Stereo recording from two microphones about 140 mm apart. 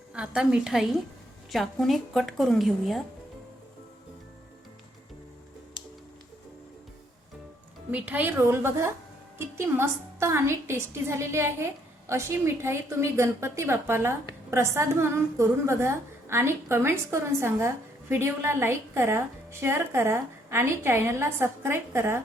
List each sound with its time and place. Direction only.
0.1 s a woman's voice: 5° right (ahead or behind)
7.9 s a woman's voice: 10° right (ahead or behind)